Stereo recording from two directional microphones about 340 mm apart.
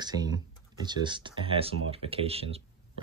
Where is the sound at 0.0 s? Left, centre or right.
Centre.